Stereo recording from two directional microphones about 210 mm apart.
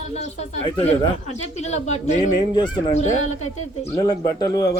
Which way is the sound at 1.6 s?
30° left (ahead or behind).